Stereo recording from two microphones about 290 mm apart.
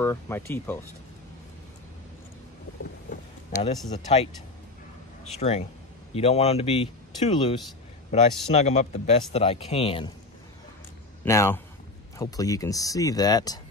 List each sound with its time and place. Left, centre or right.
0.0 s speech: centre
3.1 s boat: left
3.9 s speech: left
5.4 s speech: left
8.1 s speech: left
11.2 s speech: centre